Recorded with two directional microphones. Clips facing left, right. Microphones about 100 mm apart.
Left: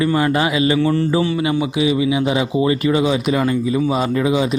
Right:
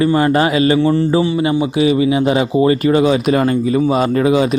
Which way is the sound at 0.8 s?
25° right (ahead or behind).